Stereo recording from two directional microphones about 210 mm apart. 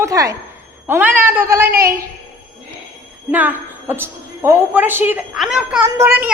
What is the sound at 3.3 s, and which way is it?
A woman's voice, 10° right (ahead or behind).